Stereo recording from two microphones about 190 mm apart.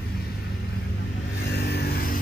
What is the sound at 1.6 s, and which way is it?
Vehicle, 60° left (ahead or behind).